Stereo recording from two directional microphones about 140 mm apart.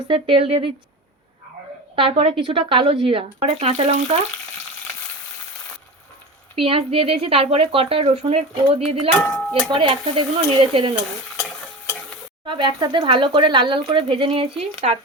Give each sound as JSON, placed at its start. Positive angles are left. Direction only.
{"t": 0.1, "sound": "speech", "side_deg": -40}
{"t": 2.0, "sound": "speech", "side_deg": -40}
{"t": 6.6, "sound": "speech", "side_deg": -40}
{"t": 9.2, "sound": "speech", "side_deg": 10}
{"t": 9.7, "sound": "speech", "side_deg": -35}
{"t": 11.3, "sound": "stir", "side_deg": 0}
{"t": 12.5, "sound": "speech", "side_deg": -35}